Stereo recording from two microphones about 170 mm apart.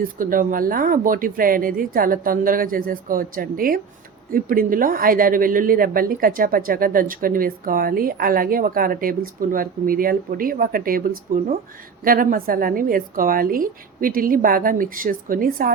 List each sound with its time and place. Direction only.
0.0 s a woman's voice: 55° right (ahead or behind)